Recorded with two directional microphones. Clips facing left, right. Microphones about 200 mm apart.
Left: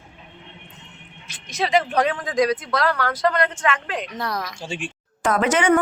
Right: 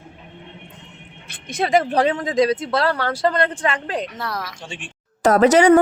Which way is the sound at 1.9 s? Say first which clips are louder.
Right 3 dB; 30° right (ahead or behind).